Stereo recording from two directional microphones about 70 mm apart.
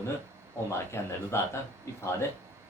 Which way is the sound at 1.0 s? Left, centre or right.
Left.